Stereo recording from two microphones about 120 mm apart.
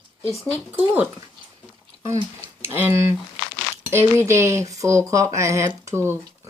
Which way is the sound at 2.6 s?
20° right (ahead or behind).